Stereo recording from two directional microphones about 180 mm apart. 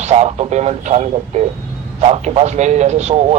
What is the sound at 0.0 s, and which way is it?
Speech, 35° right (ahead or behind).